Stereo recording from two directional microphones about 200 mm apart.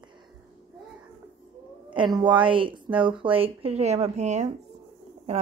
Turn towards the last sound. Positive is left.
turn(degrees=-30)  # may be behind; listen again after turning